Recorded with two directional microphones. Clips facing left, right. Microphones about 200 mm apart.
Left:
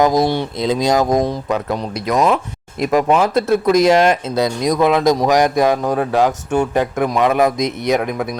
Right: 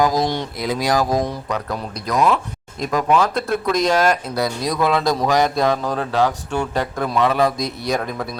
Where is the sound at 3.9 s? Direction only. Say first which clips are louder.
Left 4 dB; 25° left (ahead or behind).